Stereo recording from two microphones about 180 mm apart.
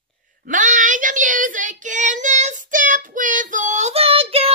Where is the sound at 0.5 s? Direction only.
45° right (ahead or behind).